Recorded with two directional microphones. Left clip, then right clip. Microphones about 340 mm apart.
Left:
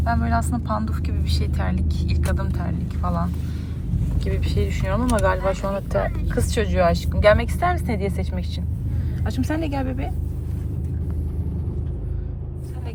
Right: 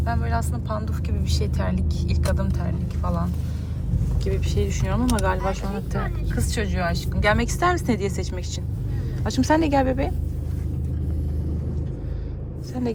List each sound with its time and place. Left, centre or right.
0.0 s speech: centre
4.3 s speech: centre
5.9 s speech: centre
7.6 s speech: centre
9.2 s speech: centre